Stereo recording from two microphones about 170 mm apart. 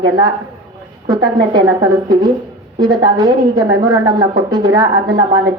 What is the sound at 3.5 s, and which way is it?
Speech, 20° right (ahead or behind).